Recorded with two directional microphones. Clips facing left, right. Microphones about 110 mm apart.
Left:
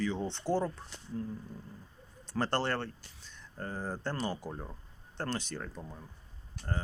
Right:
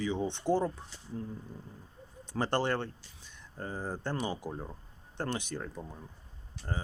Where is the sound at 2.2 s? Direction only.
15° right (ahead or behind).